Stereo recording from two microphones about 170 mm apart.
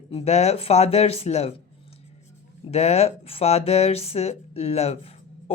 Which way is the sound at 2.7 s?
40° left (ahead or behind).